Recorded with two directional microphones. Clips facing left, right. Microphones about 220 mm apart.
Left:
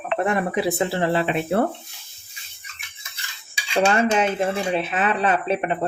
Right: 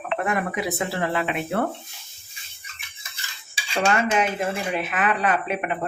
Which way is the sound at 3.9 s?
30° left (ahead or behind).